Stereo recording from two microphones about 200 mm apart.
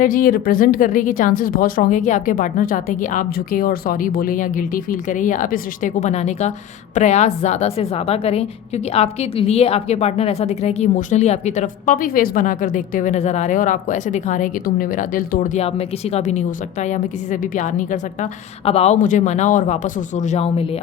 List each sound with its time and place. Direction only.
0.0 s a woman's voice: 45° left (ahead or behind)